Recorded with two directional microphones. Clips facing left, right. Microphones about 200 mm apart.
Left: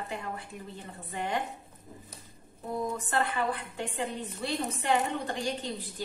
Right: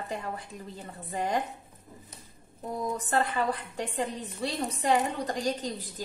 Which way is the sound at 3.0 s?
40° right (ahead or behind).